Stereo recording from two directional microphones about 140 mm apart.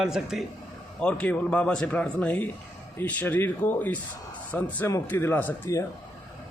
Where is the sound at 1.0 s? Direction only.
10° left (ahead or behind).